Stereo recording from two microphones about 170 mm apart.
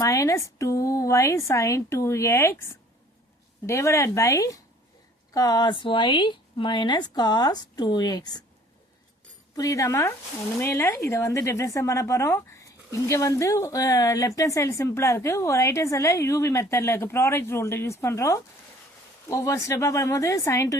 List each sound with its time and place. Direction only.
0.0 s speech: 20° left (ahead or behind)
3.7 s speech: 15° left (ahead or behind)
9.6 s speech: 20° left (ahead or behind)